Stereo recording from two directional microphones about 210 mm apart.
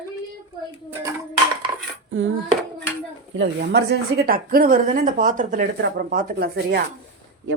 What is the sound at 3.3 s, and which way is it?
Speech, 55° right (ahead or behind).